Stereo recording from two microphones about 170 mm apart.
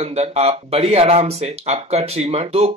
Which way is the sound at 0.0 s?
40° right (ahead or behind).